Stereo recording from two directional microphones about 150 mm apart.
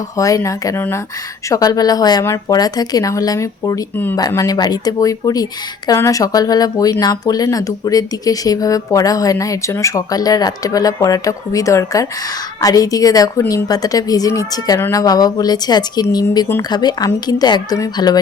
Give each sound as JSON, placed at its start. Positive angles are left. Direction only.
{"t": 0.2, "sound": "a woman's voice", "side_deg": 20}